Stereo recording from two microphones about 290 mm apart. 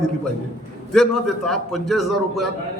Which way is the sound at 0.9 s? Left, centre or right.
Centre.